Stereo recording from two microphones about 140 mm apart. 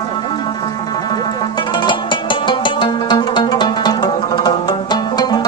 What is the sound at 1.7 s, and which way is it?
Music, 35° left (ahead or behind).